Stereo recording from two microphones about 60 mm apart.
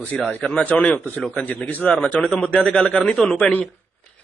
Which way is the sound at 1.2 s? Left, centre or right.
Centre.